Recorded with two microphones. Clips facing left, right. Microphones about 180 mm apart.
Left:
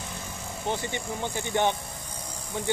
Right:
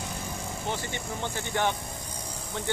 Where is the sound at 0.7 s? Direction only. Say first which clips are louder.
Left 4 dB; 15° left (ahead or behind).